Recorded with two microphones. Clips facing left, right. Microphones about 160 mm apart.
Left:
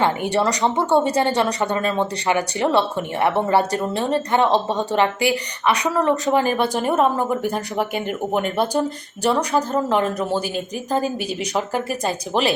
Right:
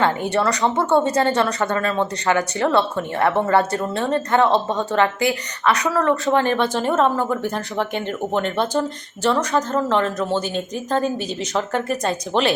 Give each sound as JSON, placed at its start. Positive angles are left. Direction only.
{"t": 0.0, "sound": "speech", "side_deg": 15}